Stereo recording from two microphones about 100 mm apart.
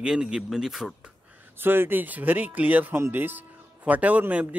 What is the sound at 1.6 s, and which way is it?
Speech, 20° right (ahead or behind).